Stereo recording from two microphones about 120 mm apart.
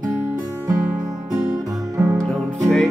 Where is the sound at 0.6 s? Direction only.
10° right (ahead or behind).